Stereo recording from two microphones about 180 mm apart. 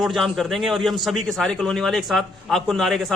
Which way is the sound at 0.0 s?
Centre (ahead or behind).